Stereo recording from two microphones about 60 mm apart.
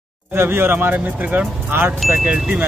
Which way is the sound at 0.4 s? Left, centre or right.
Right.